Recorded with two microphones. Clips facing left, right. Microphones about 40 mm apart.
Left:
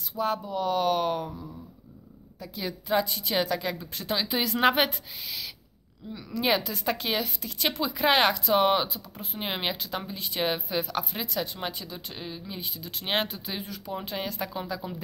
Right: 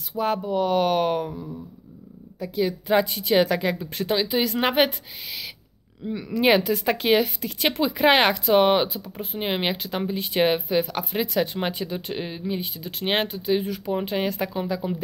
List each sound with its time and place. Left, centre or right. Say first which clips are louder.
0.2 s speech: right 5 dB; right
1.3 s a sound: right 6 dB; centre
2.9 s speech: right 5 dB; right
4.3 s speech: right 1 dB; centre
6.1 s speech: right 7 dB; right
10.7 s speech: right 6 dB; centre
12.5 s speech: right 6 dB; right
13.7 s speech: right 8 dB; right